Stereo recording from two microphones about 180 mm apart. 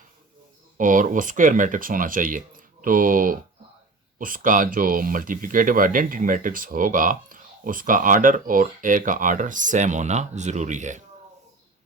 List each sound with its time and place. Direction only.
0.8 s speech: 45° right (ahead or behind)